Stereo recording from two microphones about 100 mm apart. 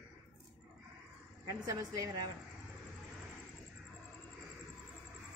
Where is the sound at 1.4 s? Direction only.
35° right (ahead or behind).